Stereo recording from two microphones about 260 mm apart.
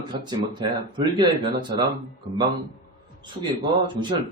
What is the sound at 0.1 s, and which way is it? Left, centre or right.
Speech, centre.